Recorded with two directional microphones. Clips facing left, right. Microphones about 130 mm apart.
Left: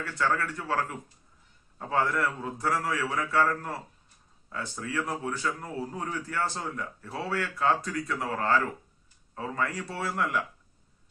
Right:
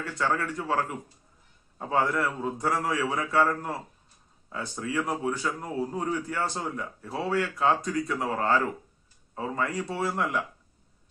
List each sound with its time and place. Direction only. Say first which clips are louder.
0.0 s speech: even; 15° right (ahead or behind)